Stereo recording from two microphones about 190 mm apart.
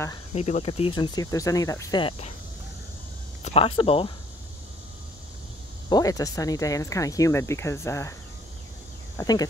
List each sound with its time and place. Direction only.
0.3 s speech: 35° left (ahead or behind)
3.4 s speech: 30° left (ahead or behind)
5.9 s speech: 20° left (ahead or behind)
9.2 s speech: 20° left (ahead or behind)